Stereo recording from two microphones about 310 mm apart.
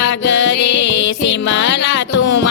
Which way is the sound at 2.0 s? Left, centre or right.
Left.